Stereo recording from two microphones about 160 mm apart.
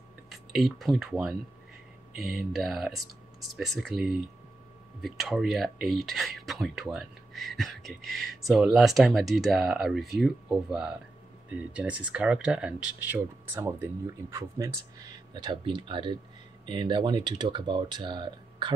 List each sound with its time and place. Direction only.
0.3 s speech: centre (ahead or behind)
15.3 s speech: 30° right (ahead or behind)